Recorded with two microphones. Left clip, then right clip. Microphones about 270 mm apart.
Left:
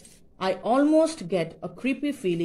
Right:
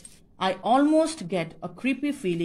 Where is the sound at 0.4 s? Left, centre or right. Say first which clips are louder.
Right 1 dB; right.